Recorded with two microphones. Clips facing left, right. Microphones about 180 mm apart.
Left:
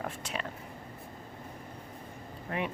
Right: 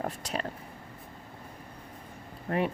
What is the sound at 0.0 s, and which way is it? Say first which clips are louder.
Speech: right 4 dB; 40° right (ahead or behind).